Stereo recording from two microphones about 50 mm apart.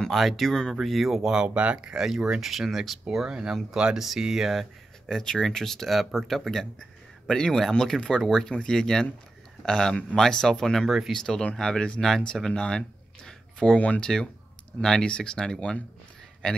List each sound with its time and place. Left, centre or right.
0.1 s speech: centre
0.7 s speech: centre
1.3 s speech: right
4.5 s speech: centre
5.2 s speech: centre
12.4 s a sound: centre
13.7 s speech: left
14.0 s speech: centre